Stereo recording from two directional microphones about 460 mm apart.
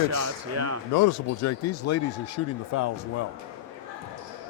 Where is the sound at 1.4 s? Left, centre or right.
Left.